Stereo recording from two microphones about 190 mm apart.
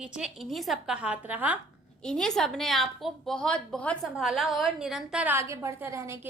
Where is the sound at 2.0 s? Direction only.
5° left (ahead or behind); by 6.3 s 15° right (ahead or behind).